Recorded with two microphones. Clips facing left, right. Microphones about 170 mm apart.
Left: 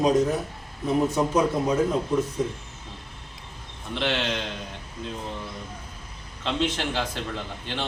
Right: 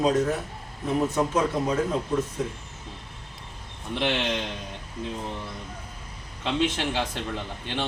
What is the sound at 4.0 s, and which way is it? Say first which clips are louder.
Speech: even; 15° right (ahead or behind).